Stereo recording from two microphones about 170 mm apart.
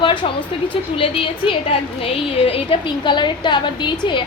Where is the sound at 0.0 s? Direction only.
25° left (ahead or behind).